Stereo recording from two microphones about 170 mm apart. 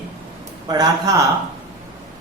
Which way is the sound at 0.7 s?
25° right (ahead or behind).